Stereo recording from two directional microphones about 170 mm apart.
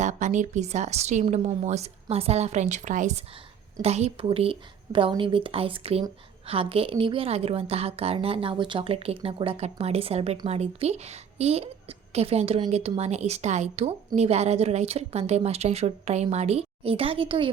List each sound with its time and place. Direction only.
0.0 s a woman's voice: 45° right (ahead or behind)